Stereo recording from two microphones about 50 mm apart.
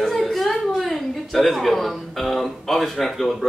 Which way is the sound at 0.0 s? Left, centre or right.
Centre.